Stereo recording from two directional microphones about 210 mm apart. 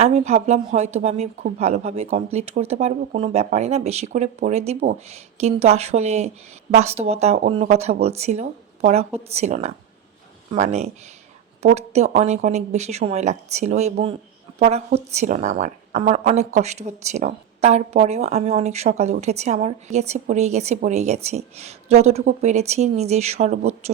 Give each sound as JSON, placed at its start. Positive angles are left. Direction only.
{"t": 0.0, "sound": "speech", "side_deg": -30}